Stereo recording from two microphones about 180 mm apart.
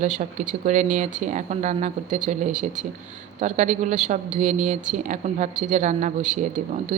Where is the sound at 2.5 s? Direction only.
5° right (ahead or behind).